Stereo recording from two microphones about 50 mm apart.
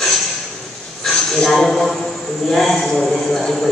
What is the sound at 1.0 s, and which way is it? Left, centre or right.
A man's voice, centre.